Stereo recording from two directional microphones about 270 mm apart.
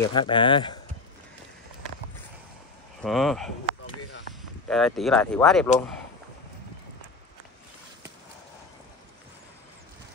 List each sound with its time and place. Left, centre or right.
0.0 s speech: centre
3.0 s speech: centre
3.6 s a sound: left
4.6 s speech: centre